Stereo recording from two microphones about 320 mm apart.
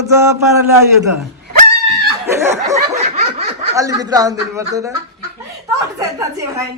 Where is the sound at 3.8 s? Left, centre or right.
Centre.